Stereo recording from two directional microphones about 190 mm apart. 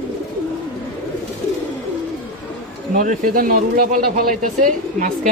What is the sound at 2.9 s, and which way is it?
Speech, 45° right (ahead or behind).